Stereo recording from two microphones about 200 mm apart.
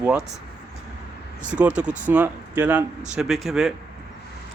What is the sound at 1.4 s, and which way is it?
Speech, 5° right (ahead or behind).